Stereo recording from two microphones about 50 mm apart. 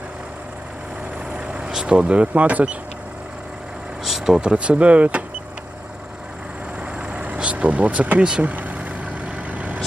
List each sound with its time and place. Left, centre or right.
1.4 s speech: centre
4.0 s vehicle: centre
4.4 s speech: right
7.0 s vehicle: right